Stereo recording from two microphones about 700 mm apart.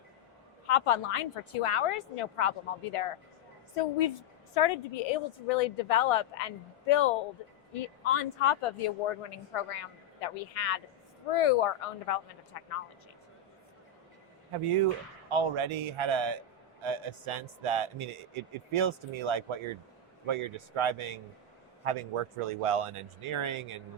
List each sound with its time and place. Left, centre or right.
0.7 s a woman's voice: left
14.6 s speech: right